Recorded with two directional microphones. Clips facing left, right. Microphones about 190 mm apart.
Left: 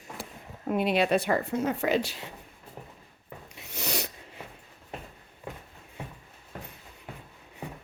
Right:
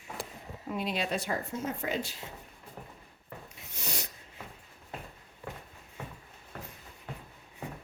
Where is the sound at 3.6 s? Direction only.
70° left (ahead or behind).